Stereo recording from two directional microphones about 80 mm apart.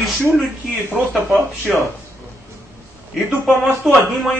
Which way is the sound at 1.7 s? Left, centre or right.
Centre.